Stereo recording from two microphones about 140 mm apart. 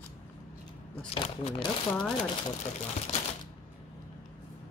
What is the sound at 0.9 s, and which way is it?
Speech, 45° left (ahead or behind).